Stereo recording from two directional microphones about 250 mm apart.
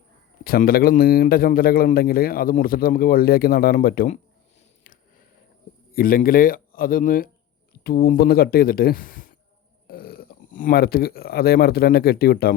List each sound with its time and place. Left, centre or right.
0.4 s a man's voice: left
5.9 s a man's voice: left